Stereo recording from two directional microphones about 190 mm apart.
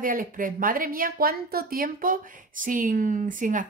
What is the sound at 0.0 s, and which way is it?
Speech, 45° right (ahead or behind).